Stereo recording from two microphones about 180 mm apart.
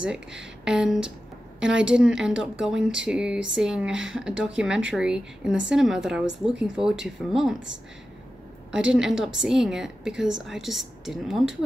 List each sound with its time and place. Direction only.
0.0 s a woman's voice: 5° right (ahead or behind)
8.7 s a woman's voice: 5° right (ahead or behind)